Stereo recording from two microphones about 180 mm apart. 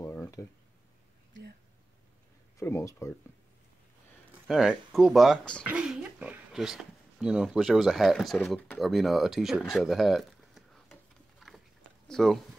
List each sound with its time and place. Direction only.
0.0 s a sound: 15° left (ahead or behind)
2.5 s speech: 15° left (ahead or behind)
4.5 s speech: centre (ahead or behind)